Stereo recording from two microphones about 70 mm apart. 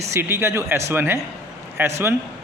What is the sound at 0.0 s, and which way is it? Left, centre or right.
A man's voice, right.